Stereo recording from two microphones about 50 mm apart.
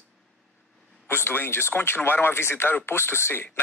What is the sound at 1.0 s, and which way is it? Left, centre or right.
Speech, left.